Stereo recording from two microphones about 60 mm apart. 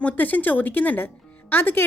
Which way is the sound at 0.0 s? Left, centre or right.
Left.